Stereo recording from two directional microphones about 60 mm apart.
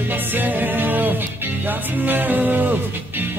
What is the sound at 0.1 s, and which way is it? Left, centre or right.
Music, right.